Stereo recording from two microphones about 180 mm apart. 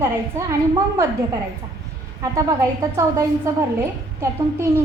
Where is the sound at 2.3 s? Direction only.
20° right (ahead or behind).